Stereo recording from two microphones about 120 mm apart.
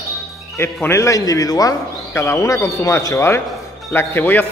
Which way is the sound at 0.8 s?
25° left (ahead or behind).